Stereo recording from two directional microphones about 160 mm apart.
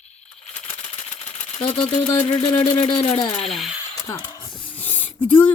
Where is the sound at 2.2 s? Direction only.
35° left (ahead or behind).